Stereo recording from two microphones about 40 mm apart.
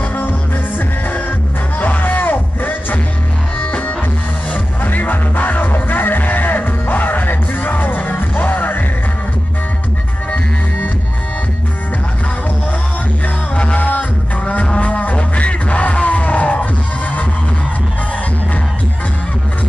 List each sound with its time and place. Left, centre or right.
1.8 s music: left
4.8 s music: left
13.7 s music: left